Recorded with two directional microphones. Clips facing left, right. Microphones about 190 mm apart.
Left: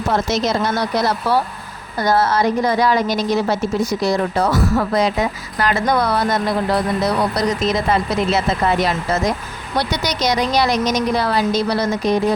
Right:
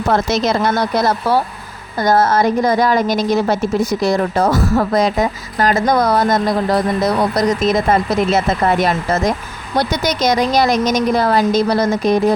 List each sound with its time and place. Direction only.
0.1 s speech: 60° right (ahead or behind)